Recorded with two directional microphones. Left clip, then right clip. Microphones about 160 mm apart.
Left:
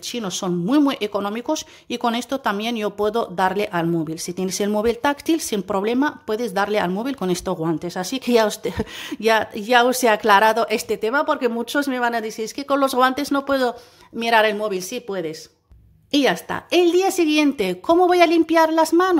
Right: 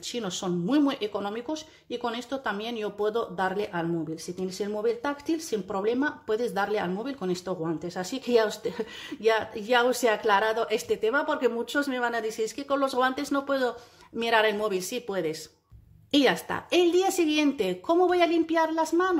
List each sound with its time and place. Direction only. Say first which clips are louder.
0.1 s speech: left 6 dB; 30° left (ahead or behind)